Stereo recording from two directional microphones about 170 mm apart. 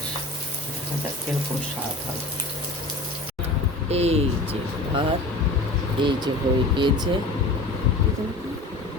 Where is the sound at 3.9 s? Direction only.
40° right (ahead or behind).